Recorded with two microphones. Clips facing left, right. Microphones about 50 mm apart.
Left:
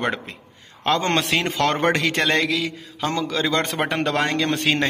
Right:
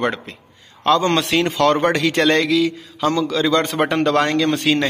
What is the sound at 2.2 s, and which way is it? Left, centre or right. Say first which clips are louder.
A man's voice: right 5 dB; centre.